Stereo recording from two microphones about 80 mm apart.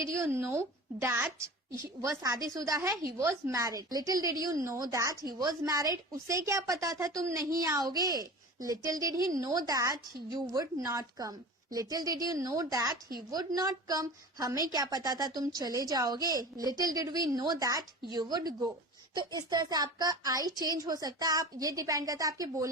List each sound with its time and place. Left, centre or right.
0.0 s a woman's voice: right
1.7 s a woman's voice: right
3.6 s a woman's voice: right
5.2 s a woman's voice: right
6.2 s a woman's voice: right
18.0 s a woman's voice: right